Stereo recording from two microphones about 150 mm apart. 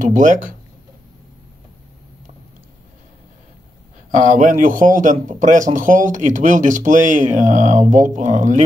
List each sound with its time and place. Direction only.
0.0 s speech: 55° right (ahead or behind)
4.1 s speech: 55° right (ahead or behind)